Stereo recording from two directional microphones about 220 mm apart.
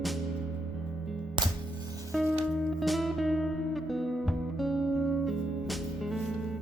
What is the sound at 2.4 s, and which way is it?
Music, centre (ahead or behind).